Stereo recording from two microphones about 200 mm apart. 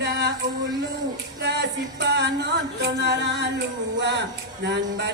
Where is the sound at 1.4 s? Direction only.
55° right (ahead or behind).